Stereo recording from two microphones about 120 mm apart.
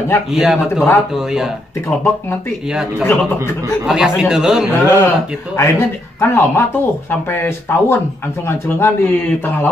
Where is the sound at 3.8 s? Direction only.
5° right (ahead or behind).